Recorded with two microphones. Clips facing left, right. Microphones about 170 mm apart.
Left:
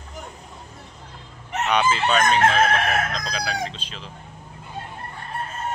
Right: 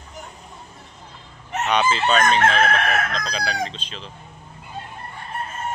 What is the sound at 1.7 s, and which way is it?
Chicken, 10° left (ahead or behind).